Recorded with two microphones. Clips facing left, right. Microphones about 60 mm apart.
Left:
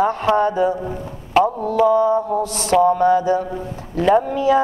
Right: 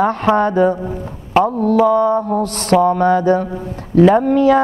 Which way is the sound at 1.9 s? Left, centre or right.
Right.